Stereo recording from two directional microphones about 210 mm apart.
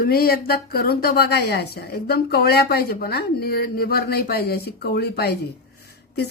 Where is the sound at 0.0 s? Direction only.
45° left (ahead or behind).